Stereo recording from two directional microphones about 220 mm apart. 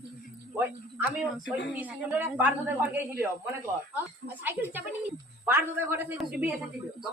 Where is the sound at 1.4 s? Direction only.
50° left (ahead or behind).